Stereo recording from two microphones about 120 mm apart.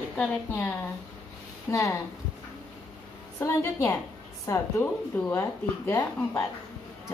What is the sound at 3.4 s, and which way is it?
Speech, 25° left (ahead or behind).